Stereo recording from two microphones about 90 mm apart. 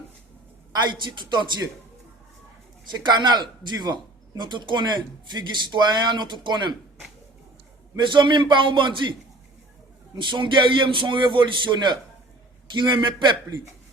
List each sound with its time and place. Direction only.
0.7 s a man's voice: 55° right (ahead or behind)
3.0 s a man's voice: 55° right (ahead or behind)
7.9 s a man's voice: 60° right (ahead or behind)
10.2 s a man's voice: 60° right (ahead or behind)